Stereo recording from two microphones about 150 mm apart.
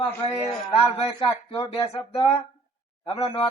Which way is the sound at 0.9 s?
40° left (ahead or behind).